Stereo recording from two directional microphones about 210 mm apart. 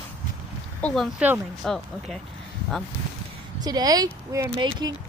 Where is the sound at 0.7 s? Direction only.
5° left (ahead or behind).